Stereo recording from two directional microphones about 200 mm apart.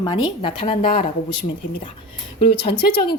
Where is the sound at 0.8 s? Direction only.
45° left (ahead or behind).